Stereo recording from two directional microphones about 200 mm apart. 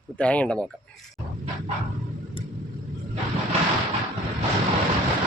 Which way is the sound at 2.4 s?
25° left (ahead or behind).